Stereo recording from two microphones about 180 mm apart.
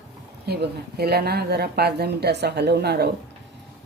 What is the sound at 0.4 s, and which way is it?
Speech, 65° right (ahead or behind).